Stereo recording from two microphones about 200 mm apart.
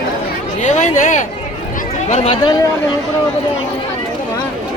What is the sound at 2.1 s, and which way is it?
Speech, 30° left (ahead or behind).